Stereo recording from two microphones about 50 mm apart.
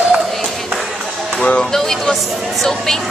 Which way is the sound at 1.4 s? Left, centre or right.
Left.